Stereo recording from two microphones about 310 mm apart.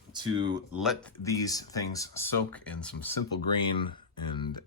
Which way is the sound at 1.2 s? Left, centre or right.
Centre.